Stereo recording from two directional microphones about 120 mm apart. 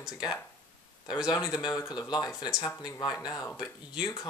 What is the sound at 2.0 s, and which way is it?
Speech, 35° left (ahead or behind).